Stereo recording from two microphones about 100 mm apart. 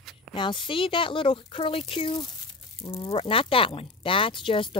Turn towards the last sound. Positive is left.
turn(degrees=60)  # may be behind; listen again after turning